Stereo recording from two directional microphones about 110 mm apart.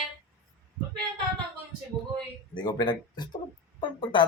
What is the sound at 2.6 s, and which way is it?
Speech, 40° left (ahead or behind).